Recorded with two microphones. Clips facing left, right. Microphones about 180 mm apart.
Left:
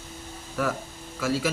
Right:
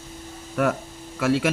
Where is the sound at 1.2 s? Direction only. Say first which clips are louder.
Right 5 dB; 65° right (ahead or behind).